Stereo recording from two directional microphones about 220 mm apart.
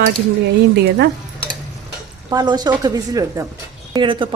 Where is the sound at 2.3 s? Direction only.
20° right (ahead or behind).